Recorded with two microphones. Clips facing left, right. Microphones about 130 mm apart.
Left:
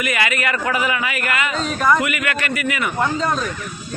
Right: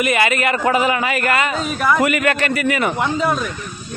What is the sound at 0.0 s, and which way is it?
A man's voice, 25° right (ahead or behind).